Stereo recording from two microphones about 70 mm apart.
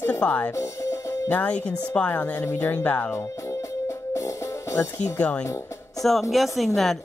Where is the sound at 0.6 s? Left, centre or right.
Left.